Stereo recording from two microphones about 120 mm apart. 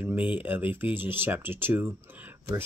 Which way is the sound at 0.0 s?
15° right (ahead or behind).